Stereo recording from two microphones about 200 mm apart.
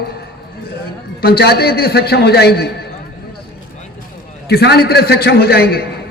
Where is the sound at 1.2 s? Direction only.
50° left (ahead or behind).